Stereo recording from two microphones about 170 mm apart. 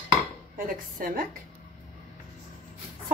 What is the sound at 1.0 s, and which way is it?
Speech, 55° right (ahead or behind).